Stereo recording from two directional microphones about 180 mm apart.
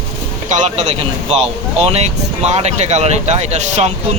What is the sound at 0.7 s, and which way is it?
Speech, 40° right (ahead or behind).